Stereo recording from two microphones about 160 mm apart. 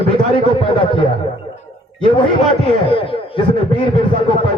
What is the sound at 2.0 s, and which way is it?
A man's voice, 30° left (ahead or behind).